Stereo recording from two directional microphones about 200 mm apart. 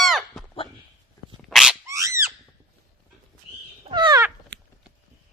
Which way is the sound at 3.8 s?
20° right (ahead or behind).